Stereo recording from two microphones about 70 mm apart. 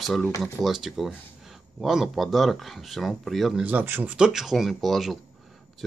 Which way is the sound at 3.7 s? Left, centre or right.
Right.